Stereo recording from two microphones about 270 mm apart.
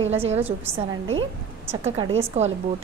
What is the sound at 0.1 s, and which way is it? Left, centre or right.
Speech, right.